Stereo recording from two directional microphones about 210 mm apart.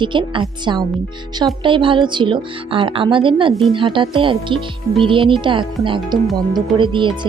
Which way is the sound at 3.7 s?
25° right (ahead or behind).